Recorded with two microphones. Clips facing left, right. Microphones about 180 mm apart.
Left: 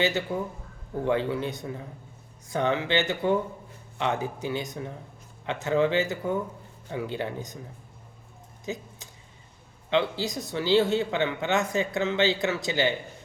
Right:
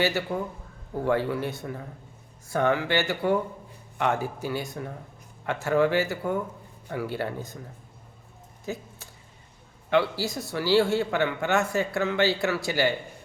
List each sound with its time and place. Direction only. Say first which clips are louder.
0.0 s speech: even; 20° left (ahead or behind)
8.6 s a sound: even; 20° left (ahead or behind)
9.9 s speech: right 1 dB; 20° left (ahead or behind)